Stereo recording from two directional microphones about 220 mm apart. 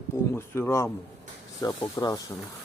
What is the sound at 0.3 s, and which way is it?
Speech, 10° left (ahead or behind).